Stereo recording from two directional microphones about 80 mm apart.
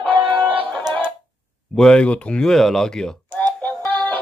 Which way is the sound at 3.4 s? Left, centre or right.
Centre.